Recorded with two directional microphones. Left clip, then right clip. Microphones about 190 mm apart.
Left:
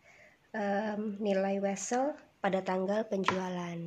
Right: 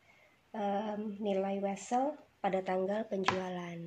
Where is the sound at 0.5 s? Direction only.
20° left (ahead or behind).